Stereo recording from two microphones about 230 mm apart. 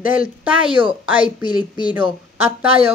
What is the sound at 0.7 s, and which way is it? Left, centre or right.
Speech, right.